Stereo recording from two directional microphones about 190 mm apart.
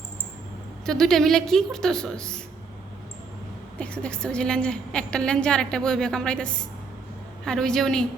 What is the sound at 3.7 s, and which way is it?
A woman's voice, 5° left (ahead or behind).